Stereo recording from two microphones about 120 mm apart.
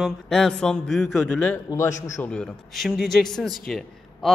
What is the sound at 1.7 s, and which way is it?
Speech, 25° left (ahead or behind).